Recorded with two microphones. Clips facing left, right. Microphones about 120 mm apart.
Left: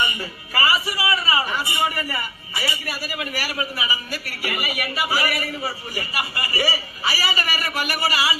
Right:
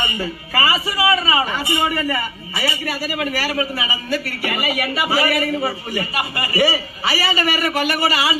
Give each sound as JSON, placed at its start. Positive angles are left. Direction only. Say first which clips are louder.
{"t": 0.7, "sound": "a man's voice", "louder": "right 5 dB", "side_deg": -25}